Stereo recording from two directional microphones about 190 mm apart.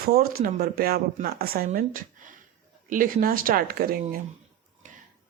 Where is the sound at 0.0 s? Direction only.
55° right (ahead or behind).